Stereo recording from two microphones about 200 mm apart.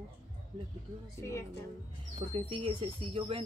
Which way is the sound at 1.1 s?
15° left (ahead or behind).